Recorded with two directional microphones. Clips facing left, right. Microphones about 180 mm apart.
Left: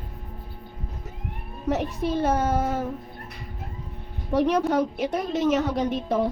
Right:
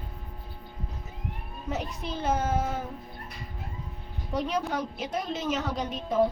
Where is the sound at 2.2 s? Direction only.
55° left (ahead or behind).